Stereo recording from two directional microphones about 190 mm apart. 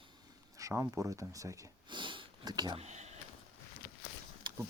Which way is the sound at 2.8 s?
35° right (ahead or behind).